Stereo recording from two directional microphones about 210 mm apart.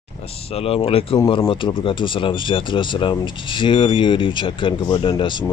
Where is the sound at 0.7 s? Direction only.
25° left (ahead or behind).